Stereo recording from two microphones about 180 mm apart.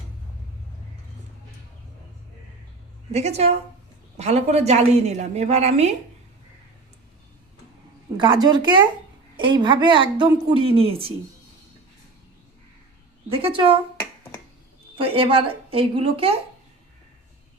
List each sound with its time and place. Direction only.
3.1 s a woman's voice: 40° right (ahead or behind)
8.2 s a woman's voice: 25° right (ahead or behind)
13.3 s a woman's voice: 30° right (ahead or behind)
14.9 s a woman's voice: 30° right (ahead or behind)